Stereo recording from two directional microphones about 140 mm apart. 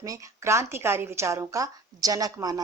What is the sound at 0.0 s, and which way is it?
Speech, 20° right (ahead or behind).